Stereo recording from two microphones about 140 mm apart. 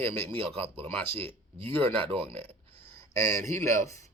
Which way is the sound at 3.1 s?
20° left (ahead or behind).